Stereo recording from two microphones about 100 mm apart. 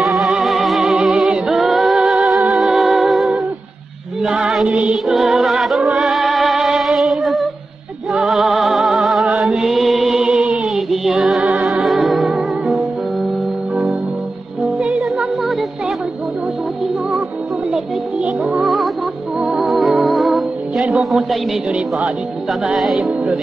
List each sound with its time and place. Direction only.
0.0 s music: centre (ahead or behind)
14.8 s music: 10° right (ahead or behind)
17.6 s music: 5° right (ahead or behind)